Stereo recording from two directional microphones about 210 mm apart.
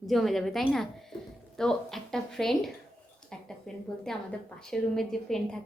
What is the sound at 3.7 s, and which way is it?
A woman's voice, centre (ahead or behind).